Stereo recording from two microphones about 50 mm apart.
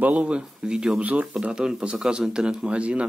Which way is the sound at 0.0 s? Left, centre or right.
Right.